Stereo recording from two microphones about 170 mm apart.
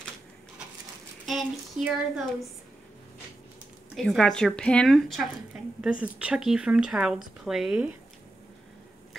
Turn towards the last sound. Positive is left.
turn(degrees=-5)  # may be behind; listen again after turning